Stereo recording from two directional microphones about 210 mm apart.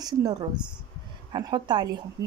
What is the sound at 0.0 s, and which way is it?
A woman's voice, 20° right (ahead or behind).